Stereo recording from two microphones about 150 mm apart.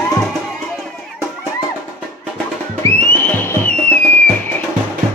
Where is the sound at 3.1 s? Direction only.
10° left (ahead or behind).